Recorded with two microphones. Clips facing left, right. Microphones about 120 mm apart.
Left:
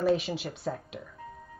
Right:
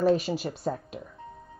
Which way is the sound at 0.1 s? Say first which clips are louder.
Right 3 dB; 40° right (ahead or behind).